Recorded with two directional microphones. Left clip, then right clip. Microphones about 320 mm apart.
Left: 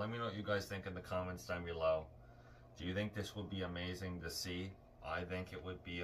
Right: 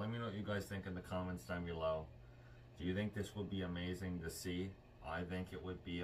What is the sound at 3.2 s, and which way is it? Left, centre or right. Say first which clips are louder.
Speech: left 1 dB; left.